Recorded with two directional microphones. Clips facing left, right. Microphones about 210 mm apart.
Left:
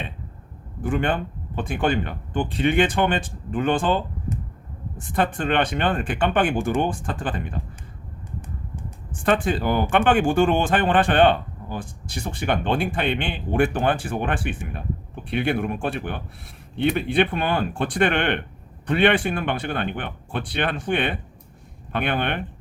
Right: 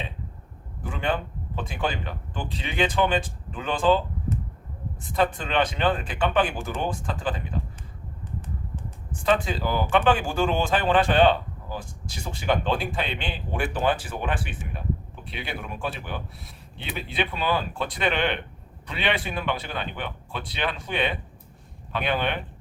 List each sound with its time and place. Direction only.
0.8 s speech: 55° left (ahead or behind)
5.1 s speech: 55° left (ahead or behind)
9.2 s speech: 55° left (ahead or behind)